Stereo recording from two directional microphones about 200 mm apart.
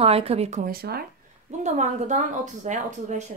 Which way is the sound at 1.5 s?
35° right (ahead or behind).